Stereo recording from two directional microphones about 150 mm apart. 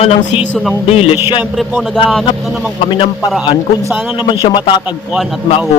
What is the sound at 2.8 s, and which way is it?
Speech, 35° left (ahead or behind).